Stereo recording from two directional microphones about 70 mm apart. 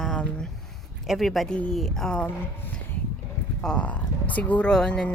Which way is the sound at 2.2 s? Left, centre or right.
Centre.